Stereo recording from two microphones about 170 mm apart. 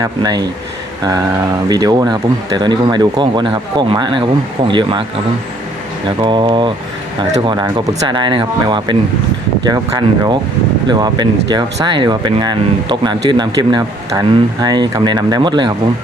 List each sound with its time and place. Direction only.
0.0 s speech: 25° right (ahead or behind)
6.1 s speech: 30° right (ahead or behind)